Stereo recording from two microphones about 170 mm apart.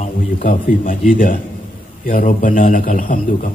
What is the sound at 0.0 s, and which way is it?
A man's voice, 50° left (ahead or behind).